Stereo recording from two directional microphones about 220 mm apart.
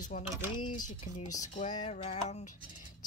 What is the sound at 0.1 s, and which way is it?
Speech, 35° left (ahead or behind).